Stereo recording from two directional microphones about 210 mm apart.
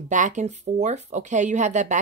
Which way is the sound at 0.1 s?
35° right (ahead or behind).